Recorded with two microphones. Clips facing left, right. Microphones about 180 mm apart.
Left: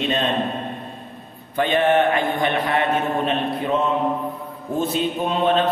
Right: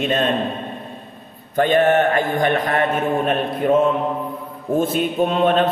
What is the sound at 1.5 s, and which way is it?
Mantra, 45° right (ahead or behind).